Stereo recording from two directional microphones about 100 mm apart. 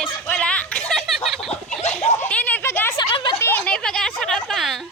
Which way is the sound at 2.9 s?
50° left (ahead or behind).